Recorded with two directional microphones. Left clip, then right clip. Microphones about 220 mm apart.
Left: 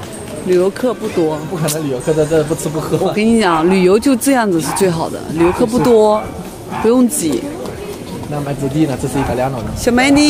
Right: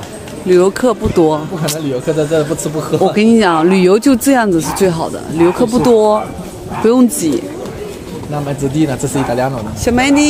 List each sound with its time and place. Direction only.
0.5 s speech: 15° right (ahead or behind)
2.1 s speech: 40° right (ahead or behind)
2.9 s speech: 20° right (ahead or behind)
8.7 s speech: 40° right (ahead or behind)
9.8 s speech: centre (ahead or behind)